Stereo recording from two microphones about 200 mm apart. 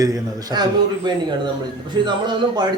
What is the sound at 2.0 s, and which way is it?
Speech, 20° right (ahead or behind).